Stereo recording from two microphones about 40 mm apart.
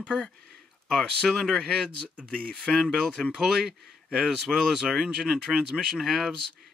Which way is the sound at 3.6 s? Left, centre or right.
Centre.